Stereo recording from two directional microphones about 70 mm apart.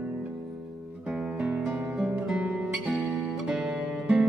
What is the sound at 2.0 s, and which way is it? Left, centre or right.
Guitar, centre.